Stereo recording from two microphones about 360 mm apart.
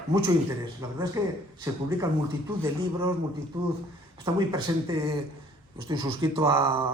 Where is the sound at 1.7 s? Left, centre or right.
Centre.